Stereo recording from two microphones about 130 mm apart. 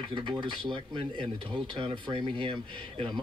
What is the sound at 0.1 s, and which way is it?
Speech, 40° right (ahead or behind).